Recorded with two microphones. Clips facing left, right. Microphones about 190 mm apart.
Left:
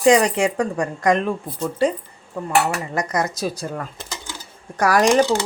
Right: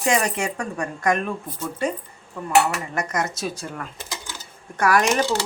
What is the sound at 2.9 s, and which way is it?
Speech, 35° left (ahead or behind).